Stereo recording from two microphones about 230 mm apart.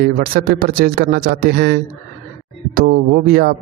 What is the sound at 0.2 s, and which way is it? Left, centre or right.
A man's voice, right.